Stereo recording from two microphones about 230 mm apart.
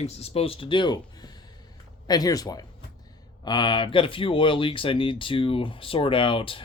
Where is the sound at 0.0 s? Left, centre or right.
Left.